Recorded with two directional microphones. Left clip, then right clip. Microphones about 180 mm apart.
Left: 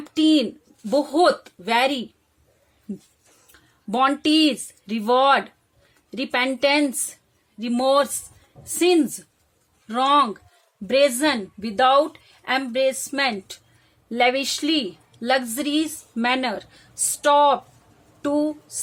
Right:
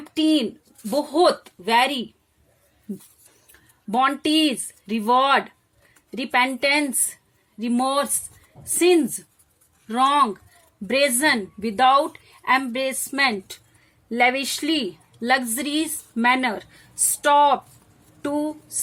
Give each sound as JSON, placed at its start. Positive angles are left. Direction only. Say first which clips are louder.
{"t": 0.0, "sound": "a woman's voice", "louder": "left 2 dB", "side_deg": 25}
{"t": 3.9, "sound": "a woman's voice", "louder": "left 1 dB", "side_deg": 20}